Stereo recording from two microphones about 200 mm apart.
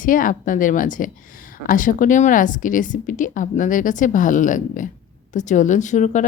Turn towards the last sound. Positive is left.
turn(degrees=40)  # may be behind; listen again after turning